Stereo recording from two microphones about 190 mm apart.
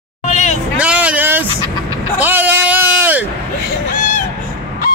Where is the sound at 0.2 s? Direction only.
35° left (ahead or behind).